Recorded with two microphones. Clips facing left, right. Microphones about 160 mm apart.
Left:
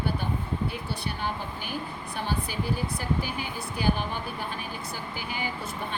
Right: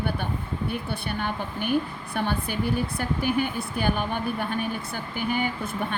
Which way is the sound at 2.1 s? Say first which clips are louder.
Right 4 dB; 60° right (ahead or behind).